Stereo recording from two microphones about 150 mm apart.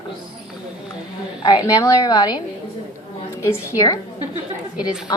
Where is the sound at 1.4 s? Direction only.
25° left (ahead or behind).